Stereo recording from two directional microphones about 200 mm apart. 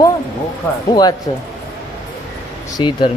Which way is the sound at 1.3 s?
25° left (ahead or behind).